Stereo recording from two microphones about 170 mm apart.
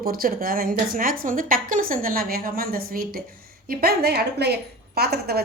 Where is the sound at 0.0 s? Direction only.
60° right (ahead or behind).